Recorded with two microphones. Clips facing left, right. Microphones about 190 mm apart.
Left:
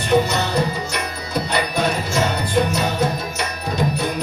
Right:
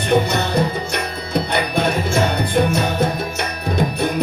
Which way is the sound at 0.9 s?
55° right (ahead or behind).